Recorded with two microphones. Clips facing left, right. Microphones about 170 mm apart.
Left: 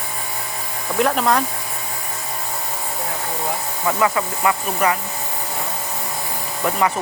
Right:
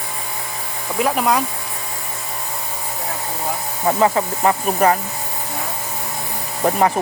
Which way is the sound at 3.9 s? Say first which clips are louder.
Right 3 dB; 35° right (ahead or behind).